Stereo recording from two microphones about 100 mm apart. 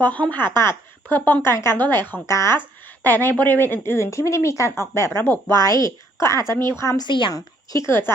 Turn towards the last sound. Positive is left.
turn(degrees=30)  # may be behind; listen again after turning